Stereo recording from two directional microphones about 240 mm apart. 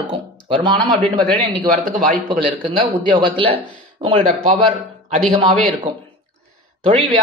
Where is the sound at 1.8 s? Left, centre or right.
Right.